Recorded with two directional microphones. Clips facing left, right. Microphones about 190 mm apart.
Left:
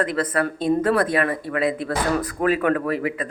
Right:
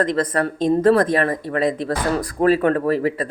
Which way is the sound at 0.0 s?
35° right (ahead or behind).